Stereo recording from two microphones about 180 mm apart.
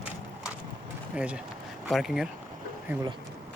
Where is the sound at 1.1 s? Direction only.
5° right (ahead or behind).